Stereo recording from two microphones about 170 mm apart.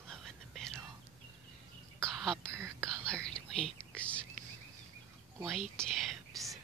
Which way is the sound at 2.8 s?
5° left (ahead or behind).